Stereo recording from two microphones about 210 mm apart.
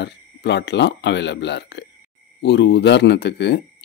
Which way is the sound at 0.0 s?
55° left (ahead or behind).